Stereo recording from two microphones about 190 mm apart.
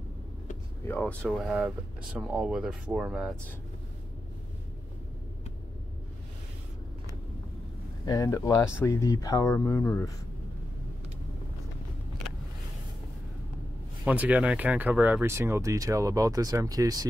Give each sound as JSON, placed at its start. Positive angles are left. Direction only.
{"t": 0.8, "sound": "speech", "side_deg": 10}
{"t": 1.3, "sound": "speech", "side_deg": -5}
{"t": 8.0, "sound": "speech", "side_deg": 20}
{"t": 14.0, "sound": "speech", "side_deg": -5}